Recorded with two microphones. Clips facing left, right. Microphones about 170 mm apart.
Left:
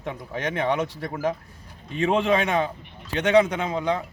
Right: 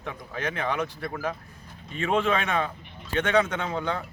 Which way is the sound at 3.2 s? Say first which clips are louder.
Left 6 dB; 15° left (ahead or behind).